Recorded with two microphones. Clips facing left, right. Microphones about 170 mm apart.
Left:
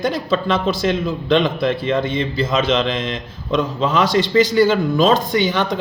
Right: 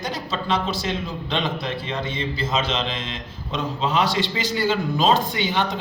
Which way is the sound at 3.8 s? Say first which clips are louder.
Left 3 dB; 45° left (ahead or behind).